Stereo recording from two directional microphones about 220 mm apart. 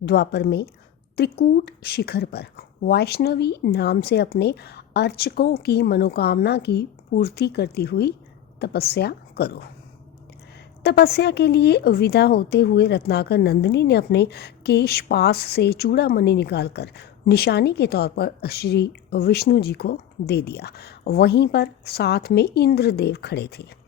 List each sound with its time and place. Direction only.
0.0 s speech: 50° left (ahead or behind)
10.8 s speech: 45° left (ahead or behind)